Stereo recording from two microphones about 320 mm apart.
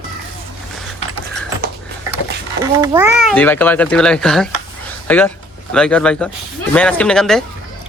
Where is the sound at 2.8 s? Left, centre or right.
Centre.